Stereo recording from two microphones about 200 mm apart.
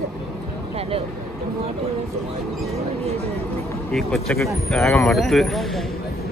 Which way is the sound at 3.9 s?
Centre (ahead or behind).